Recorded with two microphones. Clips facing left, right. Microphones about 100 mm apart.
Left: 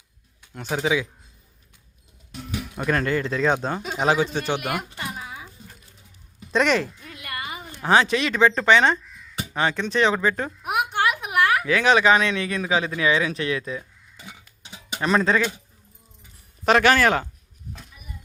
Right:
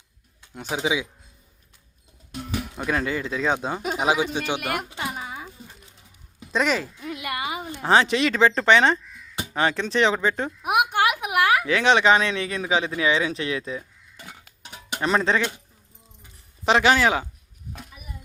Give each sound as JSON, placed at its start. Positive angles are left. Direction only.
{"t": 0.5, "sound": "speech", "side_deg": -10}
{"t": 2.7, "sound": "speech", "side_deg": -5}
{"t": 4.6, "sound": "speech", "side_deg": 0}
{"t": 4.9, "sound": "a sound", "side_deg": 0}
{"t": 6.5, "sound": "speech", "side_deg": 0}
{"t": 7.0, "sound": "a sound", "side_deg": -15}
{"t": 7.9, "sound": "speech", "side_deg": -25}
{"t": 9.9, "sound": "speech", "side_deg": -25}
{"t": 10.6, "sound": "a sound", "side_deg": -15}
{"t": 11.6, "sound": "speech", "side_deg": -25}
{"t": 15.0, "sound": "speech", "side_deg": -25}
{"t": 16.6, "sound": "speech", "side_deg": -15}